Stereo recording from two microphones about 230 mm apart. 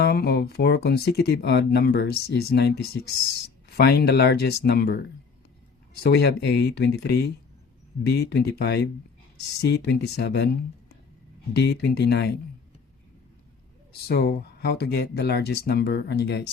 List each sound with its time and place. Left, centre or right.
0.0 s speech: left
14.1 s speech: left